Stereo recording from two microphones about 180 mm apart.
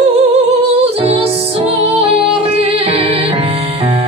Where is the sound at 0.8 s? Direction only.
35° right (ahead or behind).